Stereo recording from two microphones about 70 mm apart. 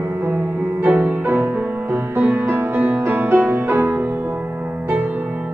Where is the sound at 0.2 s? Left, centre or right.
Right.